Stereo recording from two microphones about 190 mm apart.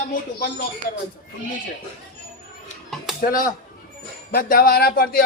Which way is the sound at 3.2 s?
45° left (ahead or behind).